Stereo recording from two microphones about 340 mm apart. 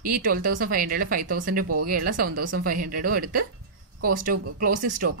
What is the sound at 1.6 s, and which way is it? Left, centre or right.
Speech, right.